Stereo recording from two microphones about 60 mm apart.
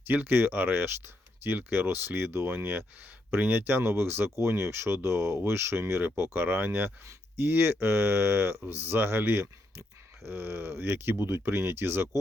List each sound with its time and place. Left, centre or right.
0.1 s speech: right